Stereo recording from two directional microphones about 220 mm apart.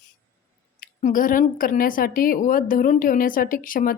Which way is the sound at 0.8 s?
40° left (ahead or behind).